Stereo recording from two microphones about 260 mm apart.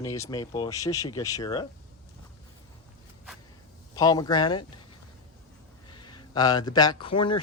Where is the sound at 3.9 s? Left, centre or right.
Centre.